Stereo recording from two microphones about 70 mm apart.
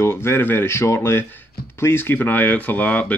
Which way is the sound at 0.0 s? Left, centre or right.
Left.